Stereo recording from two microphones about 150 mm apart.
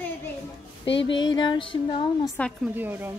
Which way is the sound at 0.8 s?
30° left (ahead or behind).